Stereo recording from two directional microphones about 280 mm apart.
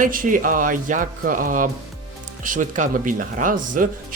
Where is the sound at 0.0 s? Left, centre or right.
Right.